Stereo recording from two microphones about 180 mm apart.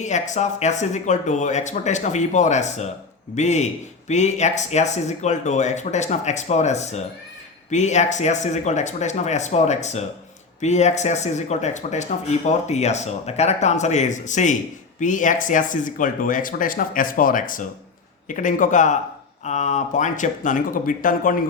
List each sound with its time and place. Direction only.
0.0 s speech: 40° left (ahead or behind)